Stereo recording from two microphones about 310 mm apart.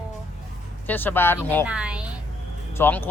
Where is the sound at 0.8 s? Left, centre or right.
Centre.